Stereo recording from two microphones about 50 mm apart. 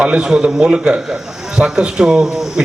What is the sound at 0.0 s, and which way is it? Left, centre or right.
A man's voice, centre.